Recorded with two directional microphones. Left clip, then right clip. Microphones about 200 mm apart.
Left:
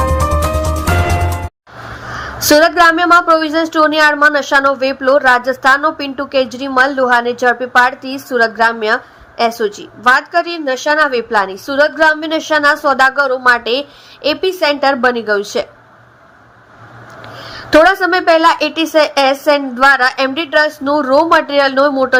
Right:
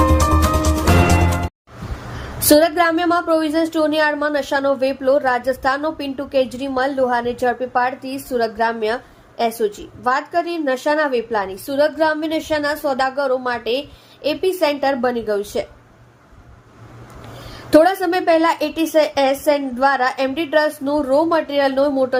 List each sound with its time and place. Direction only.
0.0 s music: centre (ahead or behind)
2.1 s a woman's voice: centre (ahead or behind)
17.3 s a woman's voice: centre (ahead or behind)